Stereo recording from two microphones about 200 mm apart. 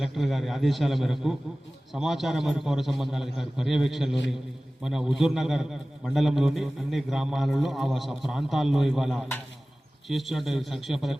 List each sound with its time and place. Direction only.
0.0 s a man's voice: centre (ahead or behind)